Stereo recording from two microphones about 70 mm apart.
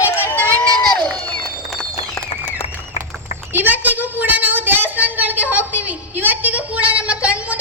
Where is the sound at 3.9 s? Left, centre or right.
Left.